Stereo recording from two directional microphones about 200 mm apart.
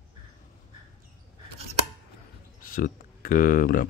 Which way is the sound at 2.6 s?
45° left (ahead or behind).